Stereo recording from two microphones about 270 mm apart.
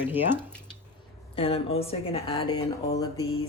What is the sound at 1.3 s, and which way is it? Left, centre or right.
Speech, left.